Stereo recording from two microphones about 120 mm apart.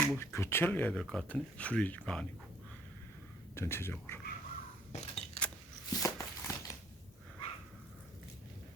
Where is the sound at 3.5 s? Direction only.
20° left (ahead or behind).